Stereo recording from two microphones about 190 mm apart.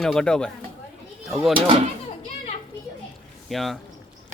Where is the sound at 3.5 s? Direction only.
Centre (ahead or behind).